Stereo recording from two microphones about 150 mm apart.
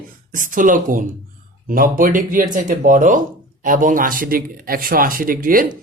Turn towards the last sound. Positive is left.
turn(degrees=-65)  # may be behind; listen again after turning